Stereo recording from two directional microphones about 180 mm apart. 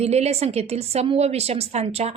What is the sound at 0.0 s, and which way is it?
A woman's voice, 35° right (ahead or behind).